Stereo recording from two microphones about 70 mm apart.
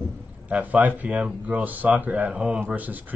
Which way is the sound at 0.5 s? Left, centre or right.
Right.